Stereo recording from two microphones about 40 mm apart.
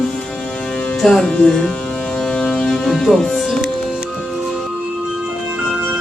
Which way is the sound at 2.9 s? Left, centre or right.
Centre.